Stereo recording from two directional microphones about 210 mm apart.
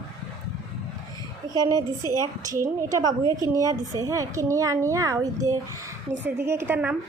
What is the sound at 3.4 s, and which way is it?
A woman's voice, 15° right (ahead or behind).